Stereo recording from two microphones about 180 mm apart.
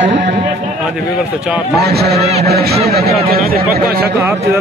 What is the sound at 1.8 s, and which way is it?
A man's voice, 60° right (ahead or behind).